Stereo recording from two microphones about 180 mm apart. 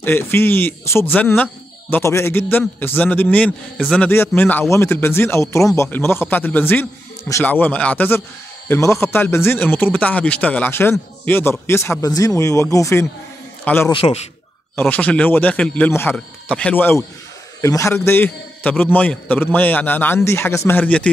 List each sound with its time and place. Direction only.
0.0 s speech: 10° left (ahead or behind)
13.9 s a man's voice: 30° left (ahead or behind)
14.8 s speech: 10° left (ahead or behind)